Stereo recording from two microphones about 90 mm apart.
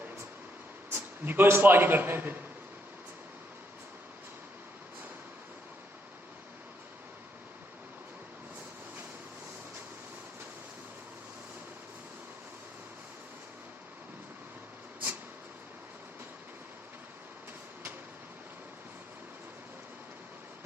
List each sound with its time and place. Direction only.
0.9 s a man's voice: 20° right (ahead or behind)